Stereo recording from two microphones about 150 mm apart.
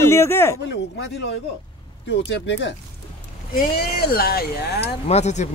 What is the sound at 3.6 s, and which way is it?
Speech, 80° left.